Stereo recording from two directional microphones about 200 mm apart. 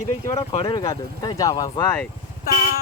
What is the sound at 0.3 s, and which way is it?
Speech, 25° left (ahead or behind).